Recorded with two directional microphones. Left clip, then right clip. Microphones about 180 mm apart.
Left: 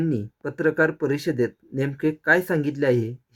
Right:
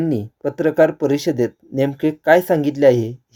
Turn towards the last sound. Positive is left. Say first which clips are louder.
# right 8 dB
turn(degrees=-15)  # may be behind; listen again after turning